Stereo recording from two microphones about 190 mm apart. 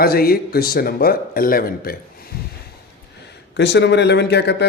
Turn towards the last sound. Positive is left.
turn(degrees=60)  # may be behind; listen again after turning